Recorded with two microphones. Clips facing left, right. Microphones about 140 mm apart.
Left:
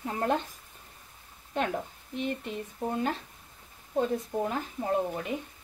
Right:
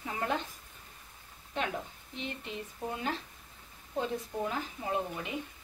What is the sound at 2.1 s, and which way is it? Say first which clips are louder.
Speech: left 7 dB; 50° left (ahead or behind).